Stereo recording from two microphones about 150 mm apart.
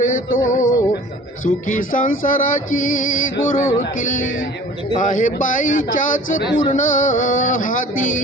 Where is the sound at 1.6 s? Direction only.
60° left (ahead or behind).